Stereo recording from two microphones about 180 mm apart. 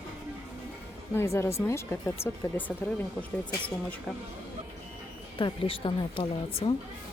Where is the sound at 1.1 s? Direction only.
15° left (ahead or behind).